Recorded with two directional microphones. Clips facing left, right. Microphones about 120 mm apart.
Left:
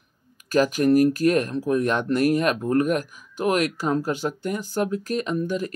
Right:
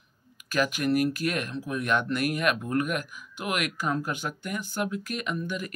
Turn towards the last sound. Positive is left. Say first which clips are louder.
# left 7 dB
turn(degrees=35)  # may be behind; listen again after turning